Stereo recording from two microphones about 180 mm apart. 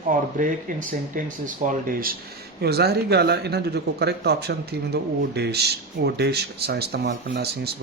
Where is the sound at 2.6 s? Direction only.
65° right (ahead or behind).